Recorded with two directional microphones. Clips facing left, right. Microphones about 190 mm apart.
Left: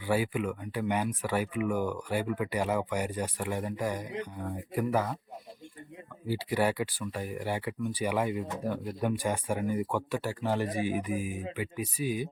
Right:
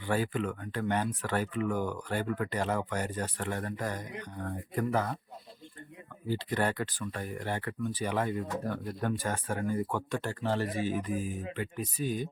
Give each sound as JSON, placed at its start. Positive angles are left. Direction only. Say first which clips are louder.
{"t": 0.0, "sound": "speech", "louder": "left 2 dB", "side_deg": 10}
{"t": 6.2, "sound": "speech", "louder": "left 2 dB", "side_deg": 10}